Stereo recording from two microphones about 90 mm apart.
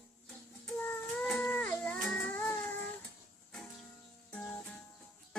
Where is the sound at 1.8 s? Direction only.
10° left (ahead or behind).